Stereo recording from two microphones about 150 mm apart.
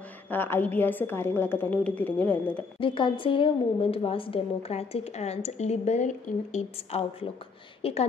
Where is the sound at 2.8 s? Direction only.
35° left (ahead or behind).